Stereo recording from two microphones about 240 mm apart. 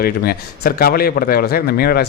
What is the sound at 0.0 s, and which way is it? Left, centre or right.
A man's voice, left.